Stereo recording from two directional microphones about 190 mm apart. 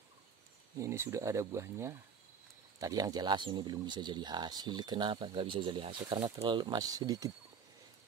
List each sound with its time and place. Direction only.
0.7 s speech: 15° right (ahead or behind)